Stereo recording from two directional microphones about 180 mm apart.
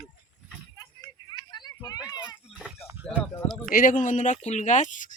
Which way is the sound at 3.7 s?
50° left (ahead or behind).